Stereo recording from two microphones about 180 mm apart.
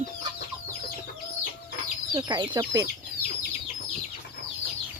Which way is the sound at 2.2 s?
25° right (ahead or behind).